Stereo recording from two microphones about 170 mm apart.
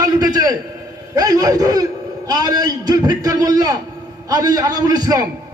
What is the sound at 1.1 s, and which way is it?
A man's voice, 20° right (ahead or behind).